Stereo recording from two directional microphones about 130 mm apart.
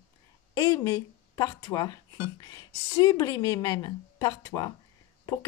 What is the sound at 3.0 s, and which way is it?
Speech, 30° left (ahead or behind).